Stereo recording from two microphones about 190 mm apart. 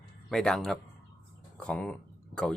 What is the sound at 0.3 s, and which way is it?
Speech, 5° left (ahead or behind).